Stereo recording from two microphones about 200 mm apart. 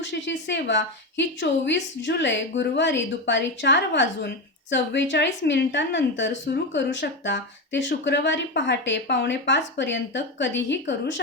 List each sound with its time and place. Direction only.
0.0 s speech: 65° left (ahead or behind)